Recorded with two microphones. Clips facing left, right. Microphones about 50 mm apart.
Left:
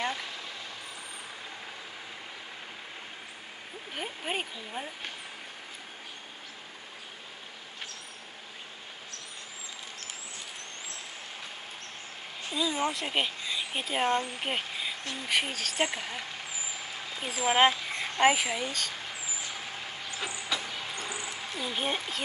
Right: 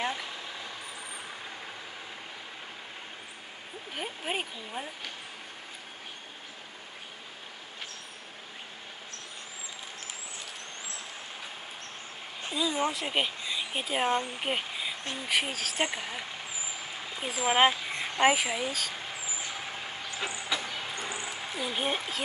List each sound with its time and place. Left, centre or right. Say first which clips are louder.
0.0 s speech: even; centre
3.9 s speech: even; centre
12.5 s speech: even; centre
20.1 s vehicle: right 1 dB; right
20.9 s a sound: right 1 dB; right
21.3 s speech: right 1 dB; centre